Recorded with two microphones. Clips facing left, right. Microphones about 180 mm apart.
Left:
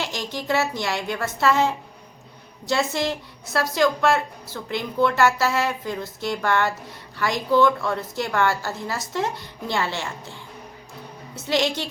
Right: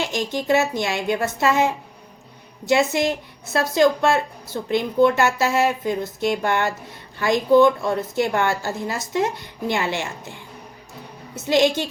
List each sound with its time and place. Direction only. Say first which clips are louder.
0.0 s a woman's voice: right 5 dB; 20° right (ahead or behind)
11.4 s a woman's voice: right 5 dB; 20° right (ahead or behind)